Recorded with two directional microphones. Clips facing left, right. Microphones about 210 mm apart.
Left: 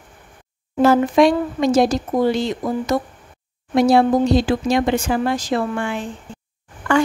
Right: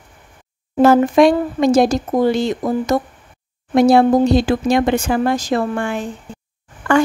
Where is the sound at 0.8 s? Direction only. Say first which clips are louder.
Right 3 dB; 50° right (ahead or behind).